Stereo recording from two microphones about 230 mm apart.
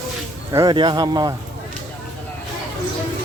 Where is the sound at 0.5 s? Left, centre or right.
Centre.